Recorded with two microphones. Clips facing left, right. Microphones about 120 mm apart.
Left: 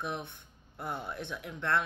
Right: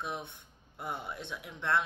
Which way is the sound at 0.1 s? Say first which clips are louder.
Left 1 dB; 20° right (ahead or behind).